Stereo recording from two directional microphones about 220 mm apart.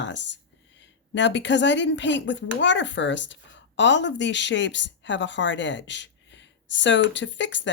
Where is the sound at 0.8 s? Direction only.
55° left (ahead or behind).